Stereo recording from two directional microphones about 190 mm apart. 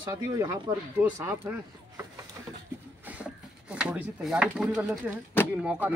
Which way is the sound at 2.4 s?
15° right (ahead or behind).